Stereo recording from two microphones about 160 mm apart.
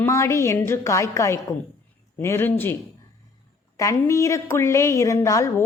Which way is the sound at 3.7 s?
20° left (ahead or behind).